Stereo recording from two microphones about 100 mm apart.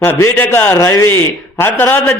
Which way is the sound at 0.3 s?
20° left (ahead or behind).